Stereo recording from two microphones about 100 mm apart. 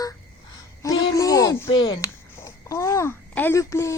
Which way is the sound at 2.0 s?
30° left (ahead or behind).